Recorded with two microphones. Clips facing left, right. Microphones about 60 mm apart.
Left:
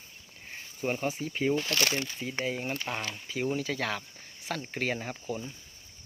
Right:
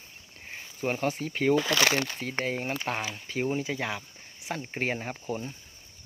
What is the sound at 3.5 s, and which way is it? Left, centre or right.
Speech, right.